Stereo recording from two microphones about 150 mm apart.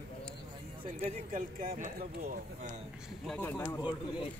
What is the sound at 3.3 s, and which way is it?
Speech, 10° left (ahead or behind).